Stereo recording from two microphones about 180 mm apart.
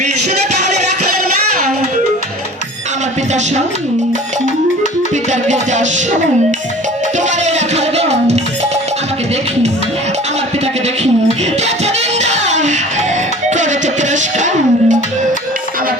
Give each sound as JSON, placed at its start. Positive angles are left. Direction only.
{"t": 5.3, "sound": "music", "side_deg": -40}
{"t": 7.2, "sound": "music", "side_deg": -40}
{"t": 11.6, "sound": "music", "side_deg": -40}